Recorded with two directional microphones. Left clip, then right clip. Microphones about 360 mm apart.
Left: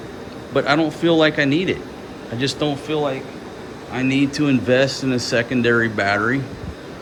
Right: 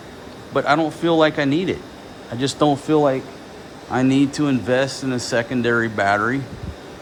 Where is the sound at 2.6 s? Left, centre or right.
Right.